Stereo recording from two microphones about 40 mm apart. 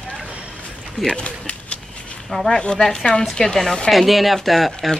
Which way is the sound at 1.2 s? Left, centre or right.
Left.